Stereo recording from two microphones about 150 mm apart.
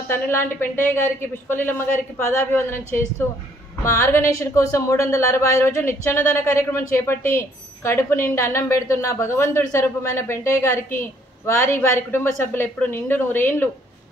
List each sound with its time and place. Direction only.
0.1 s a woman's voice: 15° left (ahead or behind)